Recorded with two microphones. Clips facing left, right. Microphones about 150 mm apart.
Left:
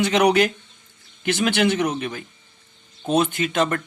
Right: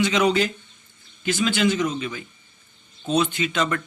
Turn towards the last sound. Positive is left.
turn(degrees=50)  # may be behind; listen again after turning